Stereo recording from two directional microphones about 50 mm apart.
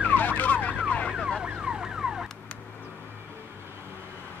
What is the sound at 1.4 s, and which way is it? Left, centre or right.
Emergency vehicle, centre.